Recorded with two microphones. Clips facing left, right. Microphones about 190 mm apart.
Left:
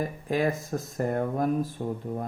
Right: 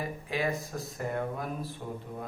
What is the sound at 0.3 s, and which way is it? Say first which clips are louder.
Speech: left 6 dB; 45° left (ahead or behind).